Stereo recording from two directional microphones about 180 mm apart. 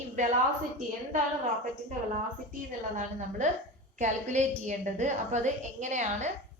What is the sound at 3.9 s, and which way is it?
A woman's voice, 40° right (ahead or behind).